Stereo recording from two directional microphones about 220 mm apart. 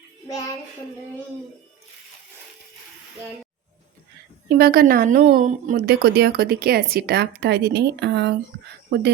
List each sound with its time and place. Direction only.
0.3 s child singing: 15° left (ahead or behind)
4.4 s a woman's voice: 45° right (ahead or behind)